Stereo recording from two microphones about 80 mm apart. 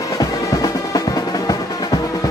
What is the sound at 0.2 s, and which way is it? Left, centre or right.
Music, left.